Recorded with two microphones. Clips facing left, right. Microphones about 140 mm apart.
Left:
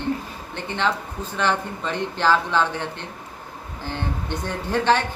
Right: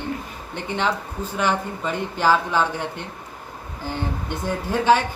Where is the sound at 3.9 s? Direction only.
10° right (ahead or behind).